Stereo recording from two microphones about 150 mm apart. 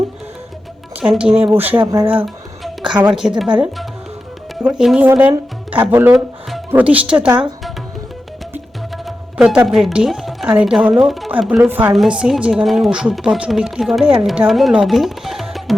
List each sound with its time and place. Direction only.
0.9 s a woman's voice: 5° right (ahead or behind)
1.8 s speech: 25° right (ahead or behind)
2.8 s a woman's voice: 5° right (ahead or behind)
4.6 s a woman's voice: 5° right (ahead or behind)
9.0 s a woman's voice: 5° right (ahead or behind)